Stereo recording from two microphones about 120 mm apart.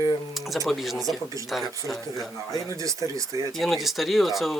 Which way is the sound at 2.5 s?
25° right (ahead or behind).